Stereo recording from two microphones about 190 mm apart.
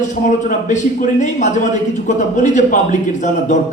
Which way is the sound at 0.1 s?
40° left (ahead or behind).